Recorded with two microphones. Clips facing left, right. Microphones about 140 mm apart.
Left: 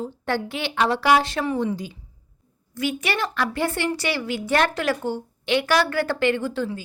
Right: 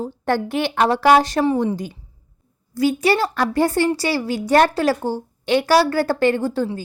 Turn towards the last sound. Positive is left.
turn(degrees=-40)  # may be behind; listen again after turning